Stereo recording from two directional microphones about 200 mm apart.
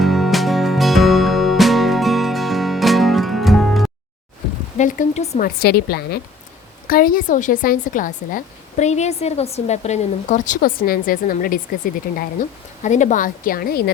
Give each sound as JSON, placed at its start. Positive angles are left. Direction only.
{"t": 0.0, "sound": "music", "side_deg": 0}
{"t": 4.8, "sound": "a woman's voice", "side_deg": 40}
{"t": 5.5, "sound": "a woman's voice", "side_deg": 50}
{"t": 12.8, "sound": "a woman's voice", "side_deg": 35}